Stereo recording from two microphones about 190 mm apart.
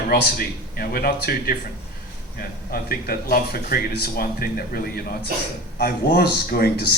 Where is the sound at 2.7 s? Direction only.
55° left (ahead or behind).